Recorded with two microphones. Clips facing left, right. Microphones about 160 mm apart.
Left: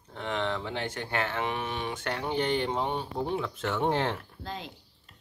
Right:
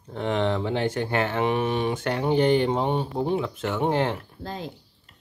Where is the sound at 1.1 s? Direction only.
20° right (ahead or behind).